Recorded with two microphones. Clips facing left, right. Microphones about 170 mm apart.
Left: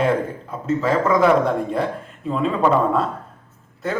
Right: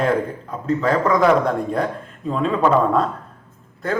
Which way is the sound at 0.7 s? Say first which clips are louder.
Even; 5° left (ahead or behind).